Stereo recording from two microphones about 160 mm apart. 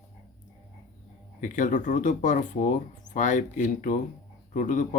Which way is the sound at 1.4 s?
55° left (ahead or behind).